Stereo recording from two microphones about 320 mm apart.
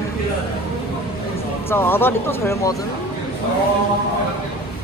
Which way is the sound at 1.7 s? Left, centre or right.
Centre.